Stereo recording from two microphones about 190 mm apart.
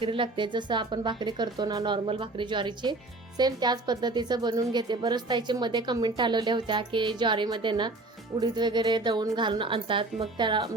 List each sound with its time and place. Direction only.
0.0 s a woman's voice: 25° right (ahead or behind)